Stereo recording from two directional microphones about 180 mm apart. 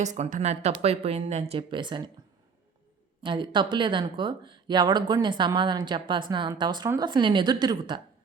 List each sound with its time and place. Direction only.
0.0 s speech: 40° right (ahead or behind); by 2.0 s 25° right (ahead or behind)
3.2 s speech: 25° right (ahead or behind)